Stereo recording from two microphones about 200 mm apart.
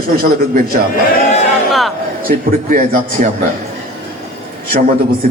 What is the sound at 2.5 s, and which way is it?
Speech, 45° right (ahead or behind).